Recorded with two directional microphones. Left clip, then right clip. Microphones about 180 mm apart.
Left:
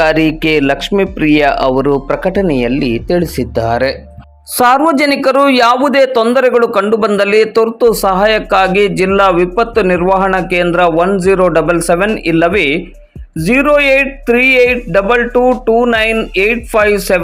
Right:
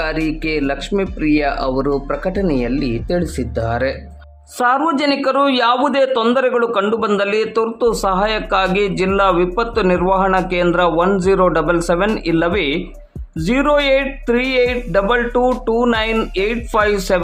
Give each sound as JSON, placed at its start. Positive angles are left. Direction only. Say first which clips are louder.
{"t": 0.0, "sound": "speech", "louder": "left 9 dB", "side_deg": 25}